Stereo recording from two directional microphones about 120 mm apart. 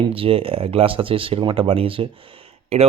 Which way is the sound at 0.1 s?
50° right (ahead or behind).